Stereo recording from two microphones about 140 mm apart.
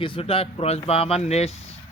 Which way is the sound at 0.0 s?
40° left (ahead or behind).